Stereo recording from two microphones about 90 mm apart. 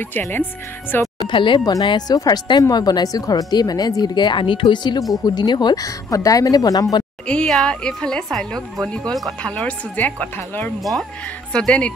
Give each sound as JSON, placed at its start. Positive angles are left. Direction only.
{"t": 0.1, "sound": "a woman's voice", "side_deg": 20}
{"t": 1.2, "sound": "speech", "side_deg": 65}
{"t": 1.6, "sound": "speech", "side_deg": 40}
{"t": 7.2, "sound": "a woman's voice", "side_deg": 10}
{"t": 10.8, "sound": "speech", "side_deg": 0}
{"t": 11.5, "sound": "a woman's voice", "side_deg": 10}